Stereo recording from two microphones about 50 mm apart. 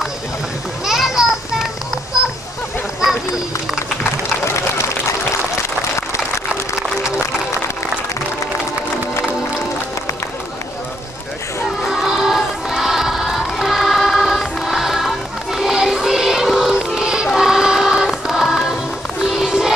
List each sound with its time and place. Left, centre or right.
0.8 s music: centre
4.6 s a sound: left
11.8 s music: centre